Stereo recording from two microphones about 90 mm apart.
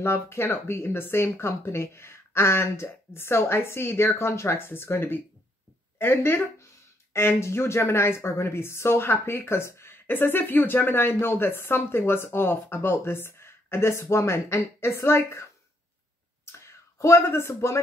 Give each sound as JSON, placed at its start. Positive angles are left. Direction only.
{"t": 0.0, "sound": "speech", "side_deg": 30}
{"t": 16.5, "sound": "speech", "side_deg": 35}